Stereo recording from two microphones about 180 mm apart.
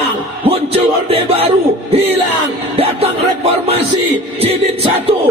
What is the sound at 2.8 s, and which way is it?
Music, 35° right (ahead or behind).